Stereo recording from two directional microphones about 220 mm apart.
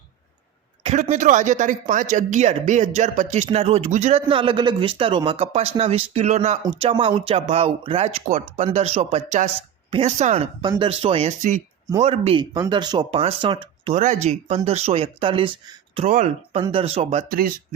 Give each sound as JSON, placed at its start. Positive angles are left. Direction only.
{"t": 0.8, "sound": "a man's voice", "side_deg": -30}
{"t": 13.9, "sound": "a man's voice", "side_deg": -35}
{"t": 16.0, "sound": "a man's voice", "side_deg": -35}
{"t": 17.2, "sound": "speech", "side_deg": -40}